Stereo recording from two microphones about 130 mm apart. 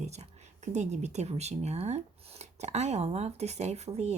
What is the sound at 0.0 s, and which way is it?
Speech, 60° right (ahead or behind).